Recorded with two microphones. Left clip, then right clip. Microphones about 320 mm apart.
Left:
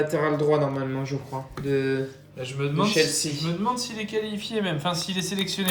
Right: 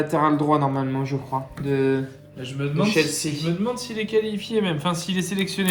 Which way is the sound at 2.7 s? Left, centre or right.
Right.